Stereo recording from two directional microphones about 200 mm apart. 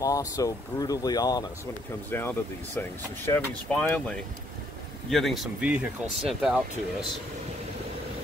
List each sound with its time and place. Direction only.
0.0 s speech: 15° left (ahead or behind); by 6.6 s 5° right (ahead or behind)